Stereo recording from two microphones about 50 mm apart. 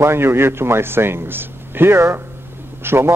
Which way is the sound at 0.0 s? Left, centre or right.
Right.